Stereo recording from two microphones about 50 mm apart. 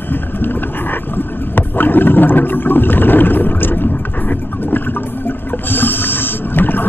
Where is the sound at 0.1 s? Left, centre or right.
Left.